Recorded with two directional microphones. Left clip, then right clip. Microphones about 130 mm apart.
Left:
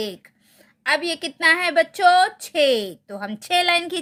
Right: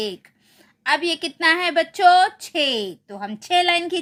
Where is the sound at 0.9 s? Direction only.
20° left (ahead or behind).